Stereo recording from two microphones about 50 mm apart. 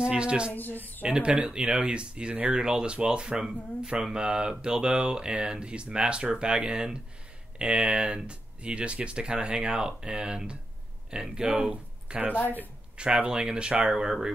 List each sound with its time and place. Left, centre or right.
0.0 s speech: centre
0.5 s speech: left
1.0 s speech: centre
11.4 s speech: right